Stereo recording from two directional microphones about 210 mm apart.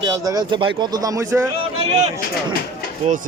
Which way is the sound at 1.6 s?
30° right (ahead or behind).